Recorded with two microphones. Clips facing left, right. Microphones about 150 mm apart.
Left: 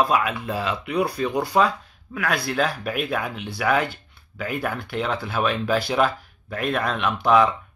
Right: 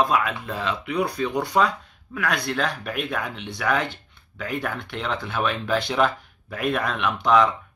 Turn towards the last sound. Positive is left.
turn(degrees=5)  # may be behind; listen again after turning